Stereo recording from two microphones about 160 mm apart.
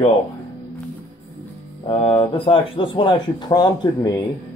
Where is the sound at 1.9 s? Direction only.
35° left (ahead or behind).